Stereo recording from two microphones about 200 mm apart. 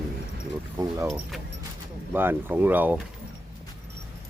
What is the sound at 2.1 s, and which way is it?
Speech, 10° right (ahead or behind).